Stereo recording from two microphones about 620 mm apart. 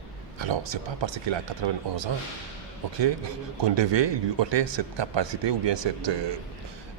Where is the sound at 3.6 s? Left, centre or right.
Right.